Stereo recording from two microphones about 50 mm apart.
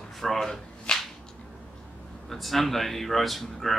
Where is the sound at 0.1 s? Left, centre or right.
Centre.